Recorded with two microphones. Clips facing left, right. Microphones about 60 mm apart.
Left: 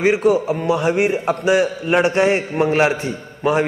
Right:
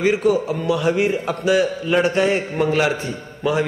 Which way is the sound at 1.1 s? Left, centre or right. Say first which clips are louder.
Left 3 dB; left.